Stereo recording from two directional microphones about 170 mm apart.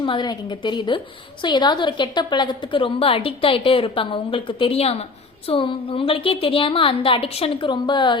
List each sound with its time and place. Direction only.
0.0 s a woman's voice: 25° left (ahead or behind)